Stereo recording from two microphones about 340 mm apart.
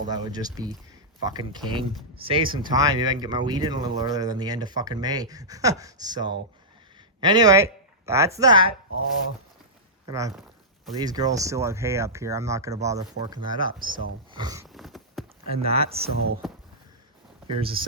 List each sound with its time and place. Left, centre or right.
0.1 s speech: centre
10.1 s speech: centre
14.3 s a sound: centre
15.6 s speech: centre
17.5 s speech: centre